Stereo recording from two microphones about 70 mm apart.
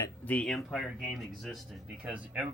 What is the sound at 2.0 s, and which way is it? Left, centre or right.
Speech, centre.